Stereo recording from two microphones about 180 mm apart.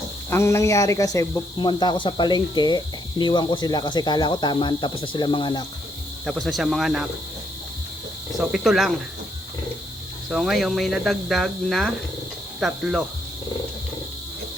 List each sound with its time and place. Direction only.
0.3 s speech: 15° left (ahead or behind)
6.2 s speech: centre (ahead or behind)
8.4 s speech: centre (ahead or behind)
10.2 s speech: centre (ahead or behind)